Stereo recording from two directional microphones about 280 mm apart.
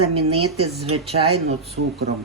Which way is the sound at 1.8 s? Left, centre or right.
Right.